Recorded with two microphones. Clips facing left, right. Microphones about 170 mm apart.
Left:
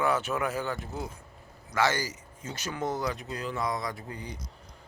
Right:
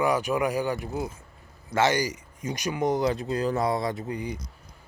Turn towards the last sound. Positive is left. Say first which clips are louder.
# right 8 dB
turn(degrees=-15)  # may be behind; listen again after turning